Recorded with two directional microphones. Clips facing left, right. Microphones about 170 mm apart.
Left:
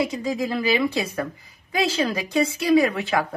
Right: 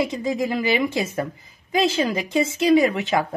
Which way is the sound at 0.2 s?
20° right (ahead or behind).